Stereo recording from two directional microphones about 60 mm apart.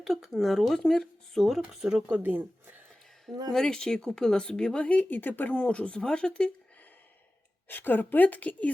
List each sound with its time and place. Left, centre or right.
0.0 s speech: centre
2.0 s speech: right
3.5 s speech: centre; by 5.5 s left
5.5 s speech: left
7.7 s a woman's voice: left